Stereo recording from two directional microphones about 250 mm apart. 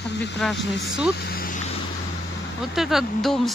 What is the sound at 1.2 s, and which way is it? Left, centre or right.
Vehicle, left.